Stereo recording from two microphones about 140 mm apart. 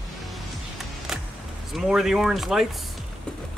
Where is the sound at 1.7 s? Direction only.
5° right (ahead or behind).